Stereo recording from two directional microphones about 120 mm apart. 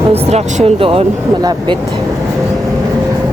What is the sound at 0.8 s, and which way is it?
Speech, 50° right (ahead or behind).